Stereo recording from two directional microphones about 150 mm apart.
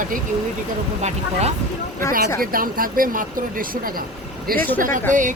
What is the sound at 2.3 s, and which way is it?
A woman's voice, 70° right (ahead or behind).